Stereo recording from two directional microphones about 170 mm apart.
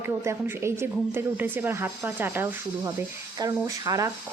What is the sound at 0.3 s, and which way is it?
Speech, 15° right (ahead or behind).